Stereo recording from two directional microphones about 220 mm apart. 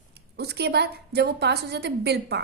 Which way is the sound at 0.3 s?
50° right (ahead or behind).